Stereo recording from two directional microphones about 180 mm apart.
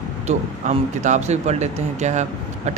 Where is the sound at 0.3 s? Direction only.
40° right (ahead or behind).